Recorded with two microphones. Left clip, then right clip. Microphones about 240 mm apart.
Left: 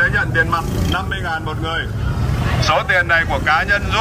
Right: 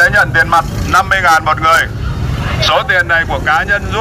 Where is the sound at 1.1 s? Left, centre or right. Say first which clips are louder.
Right 13 dB; centre.